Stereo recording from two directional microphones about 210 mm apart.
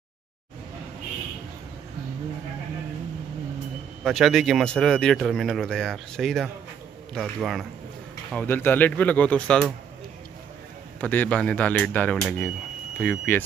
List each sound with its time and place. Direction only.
4.0 s speech: centre (ahead or behind)
8.3 s speech: 10° left (ahead or behind)
11.0 s speech: 5° left (ahead or behind)